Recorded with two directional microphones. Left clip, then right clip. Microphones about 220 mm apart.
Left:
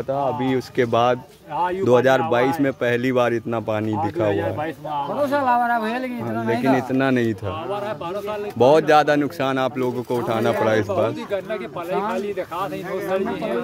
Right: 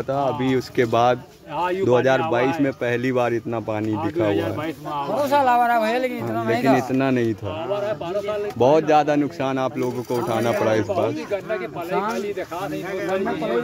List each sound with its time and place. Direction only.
0.1 s speech: centre (ahead or behind)
5.2 s speech: 40° right (ahead or behind); by 6.8 s 20° right (ahead or behind)
6.9 s speech: 15° left (ahead or behind)
8.5 s speech: 20° left (ahead or behind)